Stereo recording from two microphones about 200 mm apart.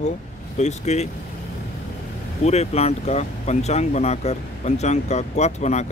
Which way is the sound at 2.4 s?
30° left (ahead or behind).